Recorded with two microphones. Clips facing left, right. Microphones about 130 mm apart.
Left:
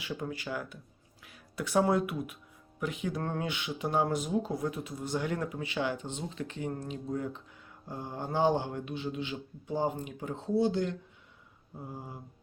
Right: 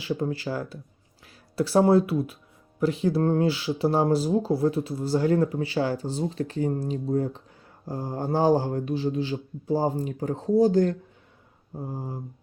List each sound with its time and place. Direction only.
0.0 s speech: 30° right (ahead or behind)